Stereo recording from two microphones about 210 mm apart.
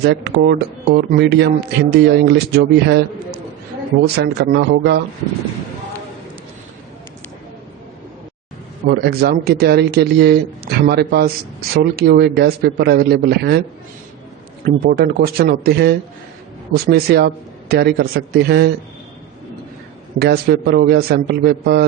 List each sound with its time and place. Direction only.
0.0 s speech: 50° right (ahead or behind)
8.9 s speech: 50° right (ahead or behind)
14.6 s speech: 45° right (ahead or behind)
20.1 s speech: 50° right (ahead or behind)